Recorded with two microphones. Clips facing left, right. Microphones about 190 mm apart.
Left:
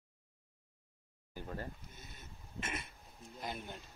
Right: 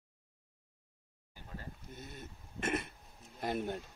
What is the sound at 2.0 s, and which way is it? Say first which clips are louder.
Speech: right 7 dB; 55° right (ahead or behind).